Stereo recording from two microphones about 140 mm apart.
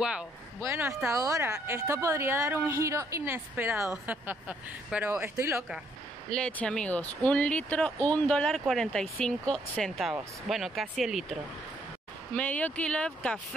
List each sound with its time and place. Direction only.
0.6 s speech: 20° right (ahead or behind)
6.3 s speech: 5° left (ahead or behind)
12.4 s speech: 10° left (ahead or behind)